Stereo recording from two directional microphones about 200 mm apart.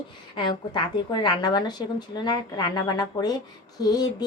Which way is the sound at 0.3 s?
25° left (ahead or behind).